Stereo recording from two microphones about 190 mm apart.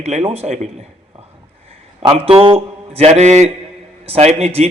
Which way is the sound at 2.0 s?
30° right (ahead or behind).